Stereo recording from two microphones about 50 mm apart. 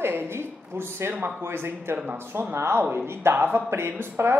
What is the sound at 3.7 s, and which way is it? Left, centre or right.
Speech, right.